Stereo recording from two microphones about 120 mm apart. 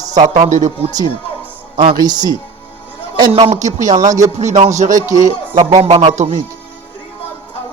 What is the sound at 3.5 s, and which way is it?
Speech, 85° right.